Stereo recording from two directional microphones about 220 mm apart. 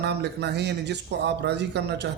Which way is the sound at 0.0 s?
50° right (ahead or behind).